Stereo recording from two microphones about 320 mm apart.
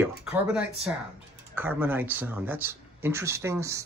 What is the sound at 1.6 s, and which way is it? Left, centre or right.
Speech, centre.